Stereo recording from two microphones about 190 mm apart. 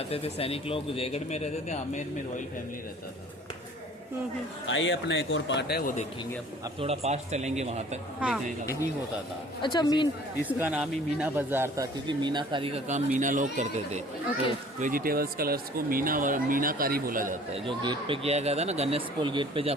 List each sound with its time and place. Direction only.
0.1 s a man's voice: 30° left (ahead or behind)
4.6 s speech: 85° left; by 5.9 s 55° left (ahead or behind)
6.7 s speech: 30° right (ahead or behind)
8.6 s a woman's voice: 15° left (ahead or behind)
10.6 s speech: 5° right (ahead or behind)
12.0 s speech: 25° right (ahead or behind)
13.1 s speech: 40° right (ahead or behind)
17.5 s speech: 25° right (ahead or behind)